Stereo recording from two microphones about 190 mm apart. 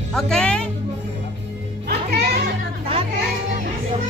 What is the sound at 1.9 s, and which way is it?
Music, 60° right (ahead or behind).